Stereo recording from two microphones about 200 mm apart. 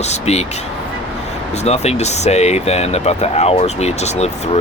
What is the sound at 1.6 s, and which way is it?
Speech, 35° left (ahead or behind).